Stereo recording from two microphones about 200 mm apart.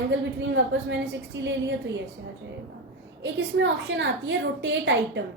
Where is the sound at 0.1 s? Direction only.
65° right (ahead or behind).